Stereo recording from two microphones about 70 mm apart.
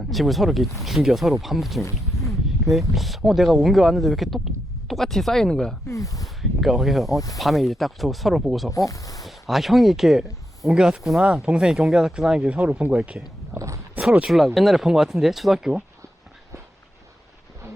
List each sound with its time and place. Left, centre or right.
0.1 s speech: centre
5.9 s speech: left
6.2 s speech: centre
8.7 s speech: left
9.2 s speech: centre
13.5 s a sound: right
14.0 s speech: centre
14.3 s speech: centre